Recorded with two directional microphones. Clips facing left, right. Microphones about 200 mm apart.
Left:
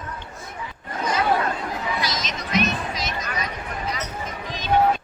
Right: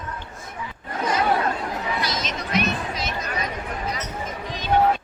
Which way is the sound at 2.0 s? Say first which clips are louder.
Right 1 dB; 55° right (ahead or behind).